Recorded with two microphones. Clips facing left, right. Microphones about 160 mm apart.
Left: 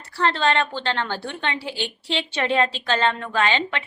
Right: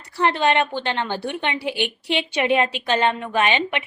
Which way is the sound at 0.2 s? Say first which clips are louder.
Right 2 dB; 15° right (ahead or behind).